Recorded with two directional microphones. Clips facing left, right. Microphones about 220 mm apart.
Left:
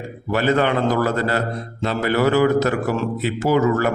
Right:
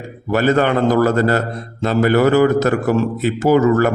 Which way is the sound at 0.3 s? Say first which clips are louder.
Right 3 dB; 45° right (ahead or behind).